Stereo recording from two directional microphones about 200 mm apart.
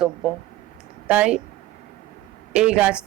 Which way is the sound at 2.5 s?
5° right (ahead or behind).